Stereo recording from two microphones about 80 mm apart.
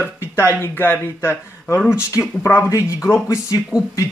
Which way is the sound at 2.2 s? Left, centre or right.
Left.